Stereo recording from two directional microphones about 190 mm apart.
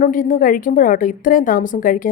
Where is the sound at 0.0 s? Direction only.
45° left (ahead or behind).